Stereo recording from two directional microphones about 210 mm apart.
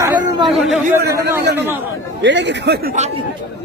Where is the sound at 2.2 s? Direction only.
55° right (ahead or behind).